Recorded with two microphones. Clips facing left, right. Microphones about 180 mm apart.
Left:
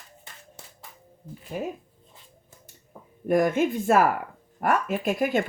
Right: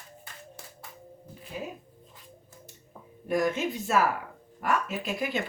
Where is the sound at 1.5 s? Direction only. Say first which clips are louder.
Left 6 dB; 50° left (ahead or behind).